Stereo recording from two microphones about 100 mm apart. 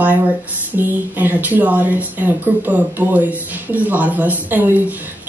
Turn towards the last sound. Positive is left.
turn(degrees=-15)  # may be behind; listen again after turning